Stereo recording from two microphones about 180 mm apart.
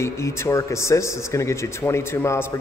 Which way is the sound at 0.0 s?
15° left (ahead or behind).